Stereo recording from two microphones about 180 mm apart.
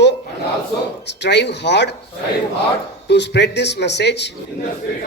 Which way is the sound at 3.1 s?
70° left (ahead or behind).